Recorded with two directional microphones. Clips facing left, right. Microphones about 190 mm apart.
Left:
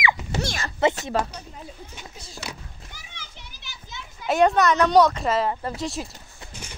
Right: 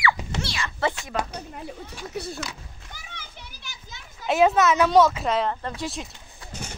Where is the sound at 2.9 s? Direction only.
50° right (ahead or behind).